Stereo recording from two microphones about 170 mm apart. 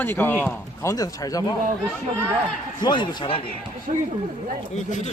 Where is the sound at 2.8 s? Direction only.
25° left (ahead or behind).